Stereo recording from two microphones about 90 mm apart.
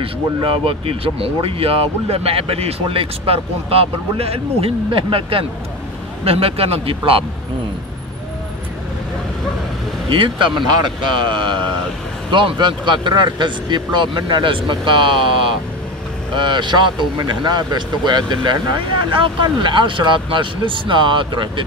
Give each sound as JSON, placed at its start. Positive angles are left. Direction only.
{"t": 0.0, "sound": "speech", "side_deg": -90}
{"t": 10.0, "sound": "speech", "side_deg": -75}